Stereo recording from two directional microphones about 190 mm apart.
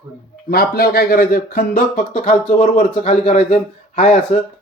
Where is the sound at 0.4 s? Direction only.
55° left (ahead or behind); by 4.2 s 40° left (ahead or behind).